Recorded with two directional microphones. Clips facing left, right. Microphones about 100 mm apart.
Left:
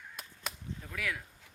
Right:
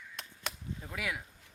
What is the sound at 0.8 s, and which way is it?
Speech, 20° right (ahead or behind).